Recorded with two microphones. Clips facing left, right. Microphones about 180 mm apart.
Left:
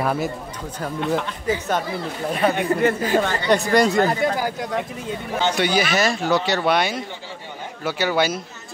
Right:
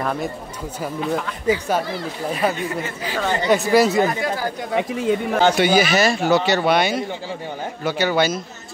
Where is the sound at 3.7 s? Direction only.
5° right (ahead or behind).